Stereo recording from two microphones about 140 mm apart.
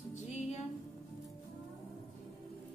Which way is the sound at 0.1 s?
55° left (ahead or behind).